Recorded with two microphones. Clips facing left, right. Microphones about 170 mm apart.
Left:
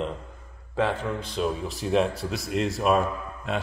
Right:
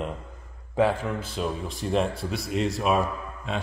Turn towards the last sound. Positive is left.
turn(degrees=0)  # may be behind; listen again after turning